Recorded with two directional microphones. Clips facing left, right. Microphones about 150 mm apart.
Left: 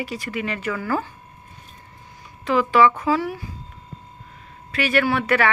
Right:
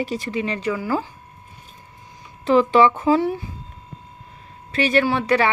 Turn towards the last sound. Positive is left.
turn(degrees=-20)  # may be behind; listen again after turning